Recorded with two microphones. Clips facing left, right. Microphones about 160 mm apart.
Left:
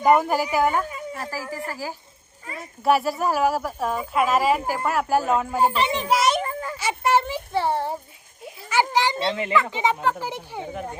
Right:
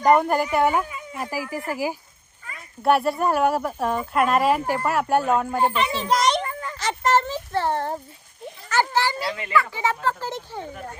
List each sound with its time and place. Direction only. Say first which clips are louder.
0.0 s speech: right 1 dB; 5° left (ahead or behind)
1.1 s speech: right 7 dB; 15° right (ahead or behind)
2.8 s speech: right 1 dB; centre (ahead or behind)
6.1 s children playing: right 1 dB; 5° left (ahead or behind)
6.4 s a sound: left 2 dB; 30° left (ahead or behind)
6.7 s a sound: even; 10° left (ahead or behind)
8.4 s a child's voice: even; 15° left (ahead or behind)